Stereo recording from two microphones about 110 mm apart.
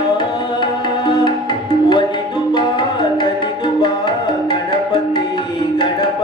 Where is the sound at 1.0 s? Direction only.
40° left (ahead or behind).